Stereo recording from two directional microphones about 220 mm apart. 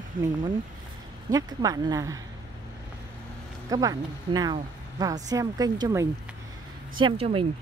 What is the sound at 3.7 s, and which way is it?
Speech, 15° right (ahead or behind).